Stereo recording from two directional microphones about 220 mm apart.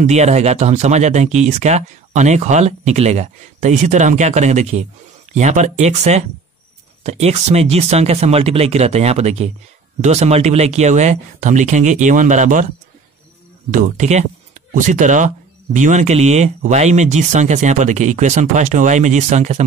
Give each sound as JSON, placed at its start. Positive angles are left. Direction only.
{"t": 0.0, "sound": "speech", "side_deg": -30}
{"t": 13.7, "sound": "speech", "side_deg": -35}